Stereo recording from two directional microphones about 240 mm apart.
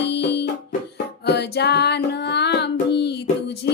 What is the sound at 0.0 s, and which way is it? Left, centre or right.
Music, left.